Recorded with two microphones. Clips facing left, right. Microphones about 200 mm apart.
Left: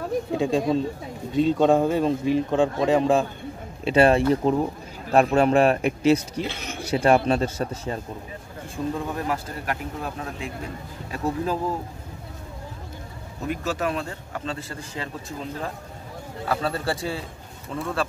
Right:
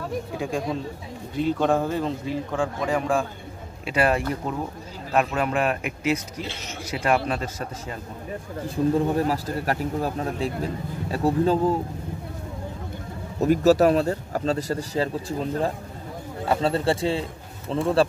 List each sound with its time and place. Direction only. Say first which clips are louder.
0.3 s speech: left 7 dB; 25° left (ahead or behind)
6.4 s speech: left 3 dB; 55° left (ahead or behind)
6.8 s speech: left 4 dB; 30° left (ahead or behind)
8.6 s speech: right 7 dB; 35° right (ahead or behind)
13.4 s speech: right 10 dB; 40° right (ahead or behind)
16.4 s a man's voice: right 4 dB; 25° right (ahead or behind)